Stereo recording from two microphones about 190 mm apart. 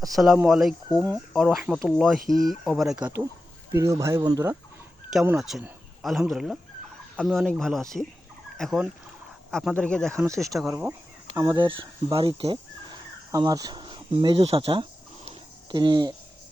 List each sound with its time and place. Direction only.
0.2 s speech: centre (ahead or behind)
3.7 s speech: 15° right (ahead or behind)
5.1 s speech: 5° right (ahead or behind)
10.2 s speech: 15° right (ahead or behind)
10.4 s speech: centre (ahead or behind)
11.3 s speech: 20° right (ahead or behind)
13.3 s a sound: 20° right (ahead or behind)